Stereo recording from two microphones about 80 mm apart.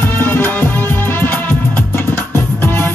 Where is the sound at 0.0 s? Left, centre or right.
Left.